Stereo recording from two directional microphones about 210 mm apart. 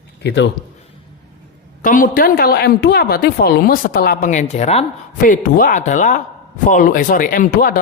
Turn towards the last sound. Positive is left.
turn(degrees=40)  # may be behind; listen again after turning